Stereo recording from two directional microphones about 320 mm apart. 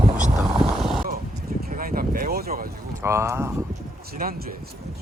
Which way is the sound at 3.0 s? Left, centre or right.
Centre.